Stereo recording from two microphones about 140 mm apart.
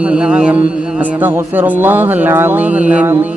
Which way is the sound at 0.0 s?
5° right (ahead or behind).